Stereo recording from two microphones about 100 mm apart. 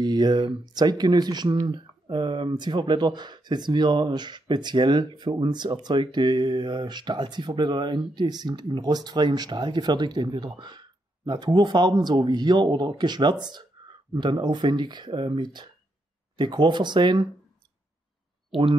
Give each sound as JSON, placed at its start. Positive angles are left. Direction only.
{"t": 0.0, "sound": "speech", "side_deg": -45}